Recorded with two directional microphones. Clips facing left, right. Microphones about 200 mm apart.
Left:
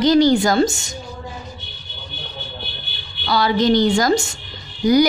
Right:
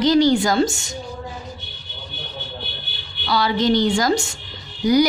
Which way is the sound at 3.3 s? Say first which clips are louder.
Left 2 dB; 50° left (ahead or behind).